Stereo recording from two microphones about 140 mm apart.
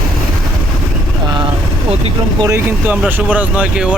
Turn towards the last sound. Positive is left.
turn(degrees=-10)  # may be behind; listen again after turning